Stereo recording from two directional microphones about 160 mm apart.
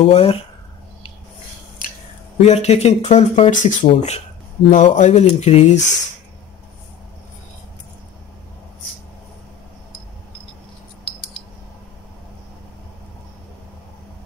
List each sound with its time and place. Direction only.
0.0 s speech: 40° left (ahead or behind)
2.4 s speech: 40° left (ahead or behind)